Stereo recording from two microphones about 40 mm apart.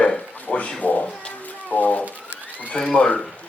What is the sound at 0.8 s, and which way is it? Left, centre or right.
Cat, left.